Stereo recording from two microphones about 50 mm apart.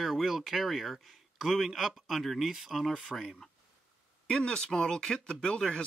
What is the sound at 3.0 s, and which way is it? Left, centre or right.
Speech, centre.